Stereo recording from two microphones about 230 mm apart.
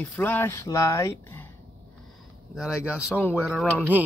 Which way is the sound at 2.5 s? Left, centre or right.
Centre.